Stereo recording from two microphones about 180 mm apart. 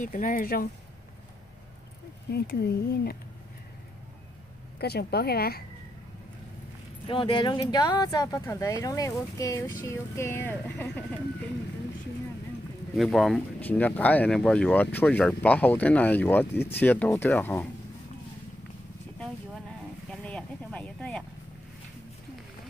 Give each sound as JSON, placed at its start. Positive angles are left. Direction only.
{"t": 0.0, "sound": "speech", "side_deg": 45}
{"t": 2.3, "sound": "a woman's voice", "side_deg": 60}
{"t": 4.7, "sound": "a woman's voice", "side_deg": 60}
{"t": 7.1, "sound": "speech", "side_deg": 30}
{"t": 12.9, "sound": "speech", "side_deg": 0}
{"t": 20.1, "sound": "a sound", "side_deg": 5}